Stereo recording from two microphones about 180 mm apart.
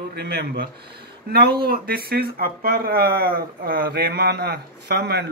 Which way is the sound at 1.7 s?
60° right (ahead or behind).